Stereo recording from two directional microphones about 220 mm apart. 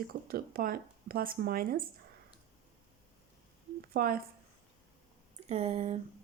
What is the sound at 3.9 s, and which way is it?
Speech, 40° right (ahead or behind).